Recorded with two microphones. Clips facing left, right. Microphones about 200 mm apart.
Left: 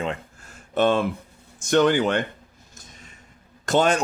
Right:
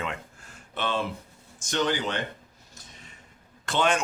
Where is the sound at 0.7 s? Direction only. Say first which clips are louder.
Left 9 dB; 50° left (ahead or behind).